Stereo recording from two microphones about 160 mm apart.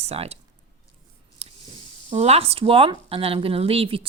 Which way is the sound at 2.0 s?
40° right (ahead or behind).